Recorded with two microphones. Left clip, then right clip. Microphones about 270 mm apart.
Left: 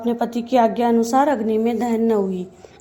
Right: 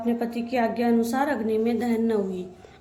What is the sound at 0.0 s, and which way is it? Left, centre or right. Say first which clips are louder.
A woman's voice: left 5 dB; left.